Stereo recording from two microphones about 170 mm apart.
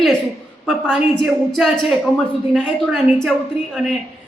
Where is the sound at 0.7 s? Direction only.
Centre (ahead or behind).